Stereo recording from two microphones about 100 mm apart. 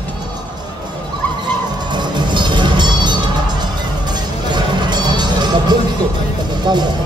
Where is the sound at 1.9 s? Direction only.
50° right (ahead or behind).